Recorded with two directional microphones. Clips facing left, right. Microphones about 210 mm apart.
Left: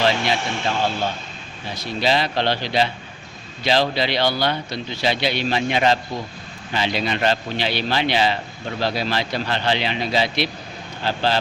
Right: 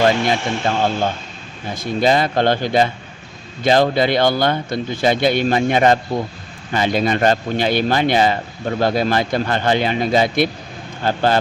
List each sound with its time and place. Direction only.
0.3 s a man's voice: 50° right (ahead or behind)